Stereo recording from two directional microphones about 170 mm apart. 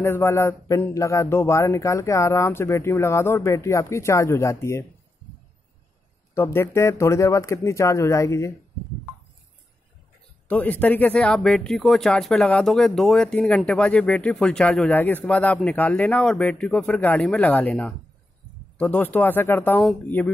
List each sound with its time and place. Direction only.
0.0 s speech: 15° left (ahead or behind)
6.3 s speech: 15° left (ahead or behind)
10.5 s speech: 10° left (ahead or behind)